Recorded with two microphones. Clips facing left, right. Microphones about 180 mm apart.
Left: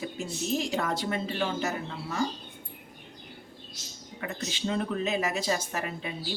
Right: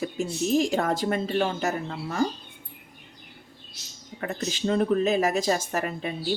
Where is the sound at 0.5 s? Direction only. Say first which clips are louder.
Right 6 dB; 45° right (ahead or behind).